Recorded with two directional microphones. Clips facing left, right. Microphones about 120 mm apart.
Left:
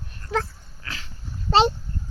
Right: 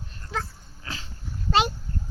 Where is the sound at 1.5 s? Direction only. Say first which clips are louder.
Left 5 dB; 30° left (ahead or behind).